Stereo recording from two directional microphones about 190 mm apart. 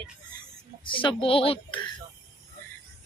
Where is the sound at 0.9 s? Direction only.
25° left (ahead or behind).